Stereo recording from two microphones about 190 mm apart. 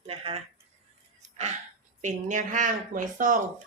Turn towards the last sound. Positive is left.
turn(degrees=-45)  # may be behind; listen again after turning